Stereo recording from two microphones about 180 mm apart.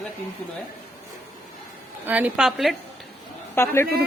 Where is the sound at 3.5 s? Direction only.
15° left (ahead or behind).